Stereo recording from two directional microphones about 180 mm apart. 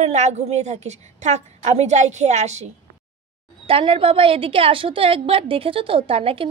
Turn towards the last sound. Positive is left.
turn(degrees=-30)  # may be behind; listen again after turning